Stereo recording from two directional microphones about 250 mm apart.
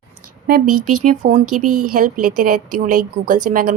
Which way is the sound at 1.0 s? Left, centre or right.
Right.